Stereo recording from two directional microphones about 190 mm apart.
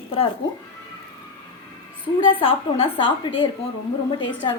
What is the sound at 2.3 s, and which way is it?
A woman's voice, 30° left (ahead or behind).